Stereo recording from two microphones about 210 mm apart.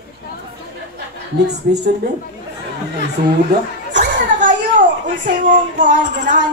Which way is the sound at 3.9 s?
40° right (ahead or behind).